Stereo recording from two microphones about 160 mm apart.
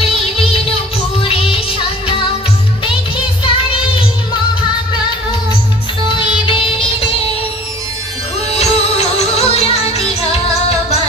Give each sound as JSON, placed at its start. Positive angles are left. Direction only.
{"t": 0.0, "sound": "music", "side_deg": 35}
{"t": 3.4, "sound": "music", "side_deg": 35}
{"t": 6.4, "sound": "music", "side_deg": 35}
{"t": 8.5, "sound": "music", "side_deg": 40}